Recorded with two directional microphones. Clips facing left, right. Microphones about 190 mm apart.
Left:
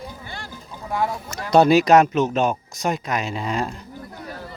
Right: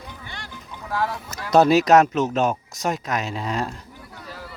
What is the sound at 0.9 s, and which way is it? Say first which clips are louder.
Speech: left 2 dB; 20° left (ahead or behind).